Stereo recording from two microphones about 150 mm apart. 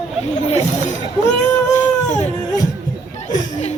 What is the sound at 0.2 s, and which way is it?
Speech, 45° left (ahead or behind).